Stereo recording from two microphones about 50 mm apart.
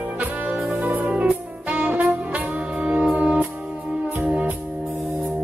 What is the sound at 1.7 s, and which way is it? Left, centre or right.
Brass instrument, right.